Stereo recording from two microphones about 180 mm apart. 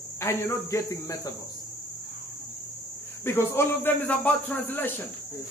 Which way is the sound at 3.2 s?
15° left (ahead or behind).